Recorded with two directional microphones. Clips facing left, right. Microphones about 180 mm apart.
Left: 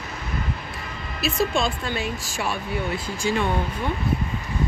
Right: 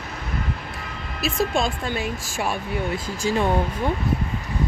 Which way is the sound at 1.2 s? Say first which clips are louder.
Even; 45° right (ahead or behind).